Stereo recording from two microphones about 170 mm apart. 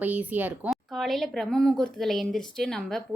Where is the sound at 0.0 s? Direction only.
10° right (ahead or behind).